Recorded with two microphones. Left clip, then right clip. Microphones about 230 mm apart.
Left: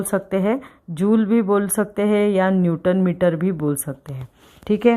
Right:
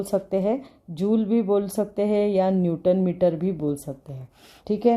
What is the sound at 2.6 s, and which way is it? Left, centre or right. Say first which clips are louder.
Speech: left 2 dB; left.